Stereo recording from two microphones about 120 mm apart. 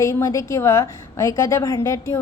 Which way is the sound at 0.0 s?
25° left (ahead or behind).